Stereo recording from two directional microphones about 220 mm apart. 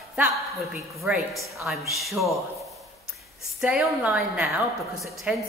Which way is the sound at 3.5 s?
5° right (ahead or behind).